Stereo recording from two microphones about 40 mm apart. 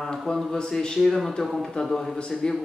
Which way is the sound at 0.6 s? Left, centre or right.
Centre.